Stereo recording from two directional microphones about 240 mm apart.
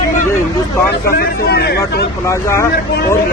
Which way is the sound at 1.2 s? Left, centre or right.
Left.